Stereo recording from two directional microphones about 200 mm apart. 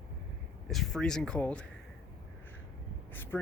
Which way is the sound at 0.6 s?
Centre (ahead or behind).